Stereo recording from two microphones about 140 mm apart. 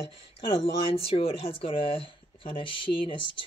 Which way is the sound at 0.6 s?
45° left (ahead or behind).